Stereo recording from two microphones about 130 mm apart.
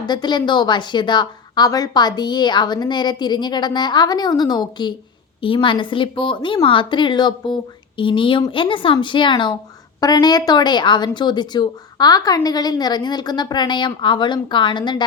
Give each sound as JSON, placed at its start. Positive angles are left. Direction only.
{"t": 0.0, "sound": "speech", "side_deg": 35}